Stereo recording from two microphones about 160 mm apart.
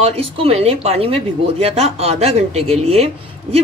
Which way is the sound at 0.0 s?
35° right (ahead or behind).